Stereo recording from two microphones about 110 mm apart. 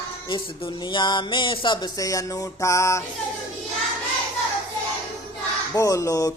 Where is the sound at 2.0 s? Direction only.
30° left (ahead or behind).